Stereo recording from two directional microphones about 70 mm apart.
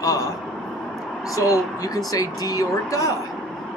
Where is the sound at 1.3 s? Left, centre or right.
Left.